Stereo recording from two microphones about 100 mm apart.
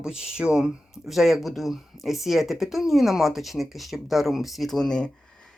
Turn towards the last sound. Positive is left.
turn(degrees=5)  # may be behind; listen again after turning